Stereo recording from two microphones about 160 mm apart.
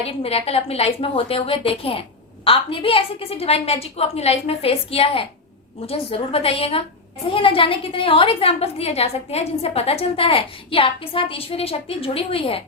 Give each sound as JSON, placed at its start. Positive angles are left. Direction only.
{"t": 0.0, "sound": "a woman's voice", "side_deg": 35}